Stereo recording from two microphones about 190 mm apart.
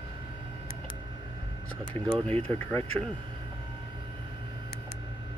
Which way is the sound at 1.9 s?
10° left (ahead or behind).